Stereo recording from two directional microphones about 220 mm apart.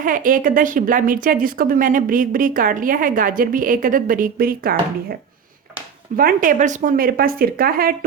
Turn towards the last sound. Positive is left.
turn(degrees=-40)  # may be behind; listen again after turning